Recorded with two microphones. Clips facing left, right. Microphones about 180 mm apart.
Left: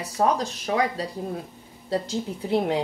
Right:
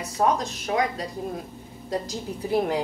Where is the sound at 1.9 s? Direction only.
25° left (ahead or behind).